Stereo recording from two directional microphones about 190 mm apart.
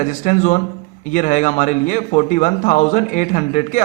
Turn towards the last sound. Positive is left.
turn(degrees=40)  # may be behind; listen again after turning